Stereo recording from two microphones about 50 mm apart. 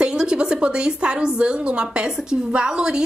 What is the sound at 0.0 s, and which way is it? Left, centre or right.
A woman's voice, centre.